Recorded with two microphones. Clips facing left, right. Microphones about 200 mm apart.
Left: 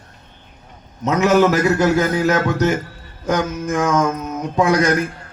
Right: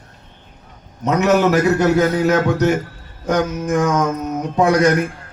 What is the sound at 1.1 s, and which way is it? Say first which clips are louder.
A man's voice: even; 60° right (ahead or behind).